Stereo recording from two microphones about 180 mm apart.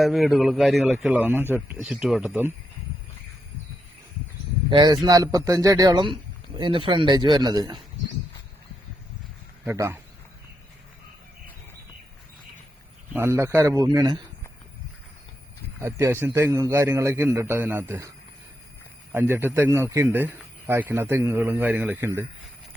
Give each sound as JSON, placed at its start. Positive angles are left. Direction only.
{"t": 0.0, "sound": "a man's voice", "side_deg": 0}
{"t": 4.7, "sound": "speech", "side_deg": -25}
{"t": 9.6, "sound": "speech", "side_deg": -15}
{"t": 13.1, "sound": "speech", "side_deg": -15}
{"t": 15.8, "sound": "speech", "side_deg": -15}
{"t": 19.1, "sound": "speech", "side_deg": -10}